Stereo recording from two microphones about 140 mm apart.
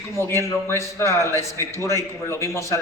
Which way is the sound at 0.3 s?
20° left (ahead or behind).